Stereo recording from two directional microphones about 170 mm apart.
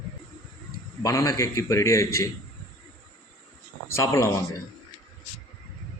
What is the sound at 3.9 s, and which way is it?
Speech, 20° left (ahead or behind).